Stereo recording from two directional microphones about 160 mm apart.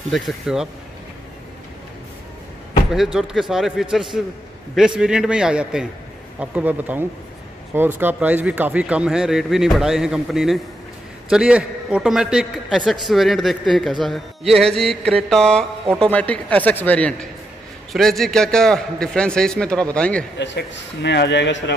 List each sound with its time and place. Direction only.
0.1 s a man's voice: centre (ahead or behind)
2.9 s a man's voice: centre (ahead or behind)
20.3 s a man's voice: 90° left